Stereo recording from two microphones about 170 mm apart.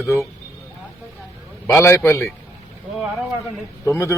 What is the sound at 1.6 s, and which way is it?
Speech, 10° left (ahead or behind).